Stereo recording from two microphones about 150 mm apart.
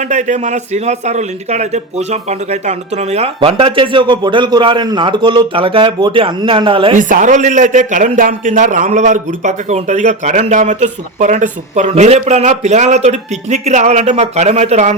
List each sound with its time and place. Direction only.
0.0 s a man's voice: 55° right (ahead or behind); by 6.9 s 35° right (ahead or behind)
6.9 s speech: 60° right (ahead or behind)